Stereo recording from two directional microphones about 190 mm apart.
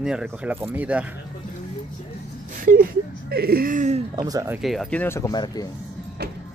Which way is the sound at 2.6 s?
50° right (ahead or behind).